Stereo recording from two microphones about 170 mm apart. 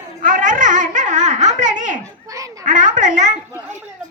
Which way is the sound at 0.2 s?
50° right (ahead or behind).